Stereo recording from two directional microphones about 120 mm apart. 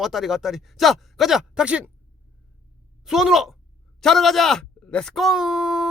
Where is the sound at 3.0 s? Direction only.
5° right (ahead or behind).